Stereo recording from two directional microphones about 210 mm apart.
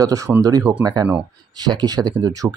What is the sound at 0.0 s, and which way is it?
A man's voice, 15° right (ahead or behind).